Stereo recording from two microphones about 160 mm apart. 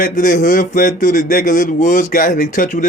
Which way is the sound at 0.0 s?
60° left (ahead or behind).